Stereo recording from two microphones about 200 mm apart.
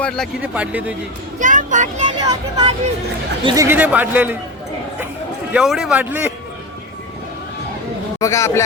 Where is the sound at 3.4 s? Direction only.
15° right (ahead or behind).